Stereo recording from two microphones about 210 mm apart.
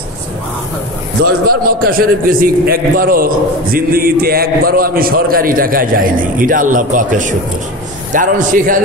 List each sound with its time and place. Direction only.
1.2 s a man's voice: 45° right (ahead or behind)